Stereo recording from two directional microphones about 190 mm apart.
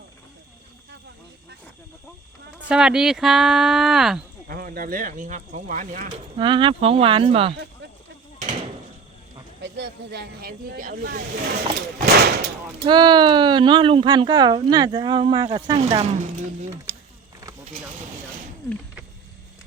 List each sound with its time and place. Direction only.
2.6 s speech: 5° right (ahead or behind)
4.4 s speech: 50° right (ahead or behind)
6.3 s speech: 25° right (ahead or behind)
9.6 s speech: 65° right (ahead or behind)
11.9 s a sound: 55° right (ahead or behind)
12.8 s speech: 25° right (ahead or behind)